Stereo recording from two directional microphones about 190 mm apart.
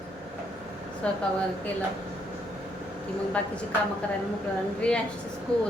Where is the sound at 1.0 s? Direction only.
5° left (ahead or behind).